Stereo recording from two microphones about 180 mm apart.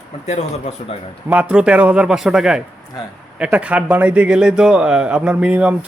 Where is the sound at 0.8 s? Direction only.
40° left (ahead or behind).